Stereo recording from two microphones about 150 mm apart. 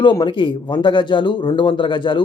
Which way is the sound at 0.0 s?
30° left (ahead or behind).